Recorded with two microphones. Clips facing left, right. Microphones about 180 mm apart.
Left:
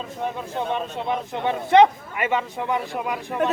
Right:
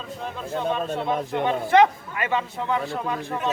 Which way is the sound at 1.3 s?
20° left (ahead or behind).